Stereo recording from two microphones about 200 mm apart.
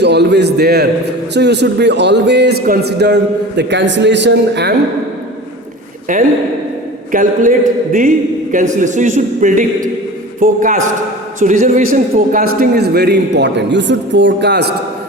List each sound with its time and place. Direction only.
0.0 s a man's voice: 60° right (ahead or behind)
6.1 s a man's voice: 40° right (ahead or behind)
8.5 s a man's voice: 40° right (ahead or behind); by 14.7 s 55° right (ahead or behind)